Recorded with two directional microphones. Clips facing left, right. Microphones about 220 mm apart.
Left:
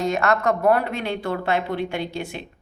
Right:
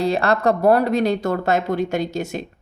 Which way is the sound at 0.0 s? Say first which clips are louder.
Right 3 dB; 35° right (ahead or behind).